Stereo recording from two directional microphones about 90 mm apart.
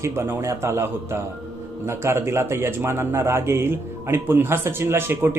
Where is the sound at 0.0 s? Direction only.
30° right (ahead or behind).